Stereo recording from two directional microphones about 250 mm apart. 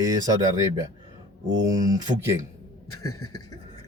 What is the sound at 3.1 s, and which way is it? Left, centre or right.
Beatboxing, left.